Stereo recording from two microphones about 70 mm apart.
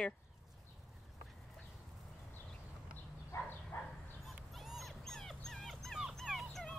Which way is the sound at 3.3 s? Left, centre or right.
Left.